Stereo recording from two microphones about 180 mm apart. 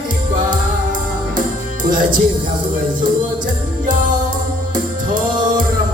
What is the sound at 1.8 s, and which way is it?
Music, 50° right (ahead or behind).